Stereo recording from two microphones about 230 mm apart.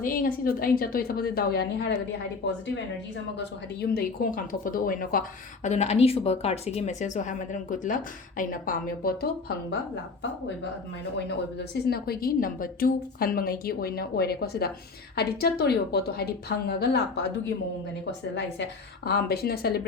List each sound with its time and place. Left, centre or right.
0.0 s a woman's voice: left
3.3 s a woman's voice: left
11.3 s a woman's voice: left